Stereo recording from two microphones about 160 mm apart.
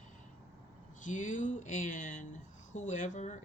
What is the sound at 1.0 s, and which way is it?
Speech, 55° left (ahead or behind).